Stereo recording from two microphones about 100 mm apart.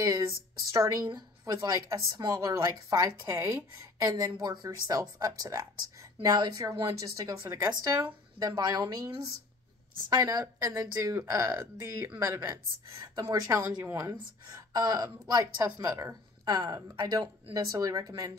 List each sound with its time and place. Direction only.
0.0 s speech: 35° right (ahead or behind)